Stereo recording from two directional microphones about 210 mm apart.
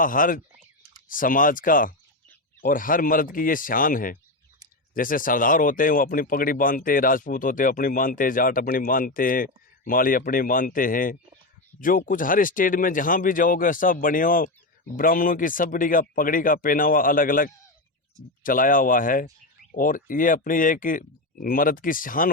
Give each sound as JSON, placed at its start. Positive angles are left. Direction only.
{"t": 0.0, "sound": "speech", "side_deg": 40}